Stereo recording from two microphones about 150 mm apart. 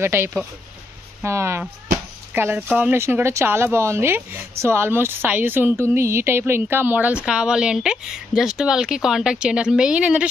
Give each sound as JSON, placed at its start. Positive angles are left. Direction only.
{"t": 0.0, "sound": "speech", "side_deg": -15}